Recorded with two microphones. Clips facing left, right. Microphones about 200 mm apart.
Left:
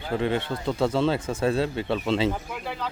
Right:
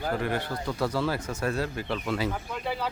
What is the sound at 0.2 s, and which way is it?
Speech, 25° left (ahead or behind).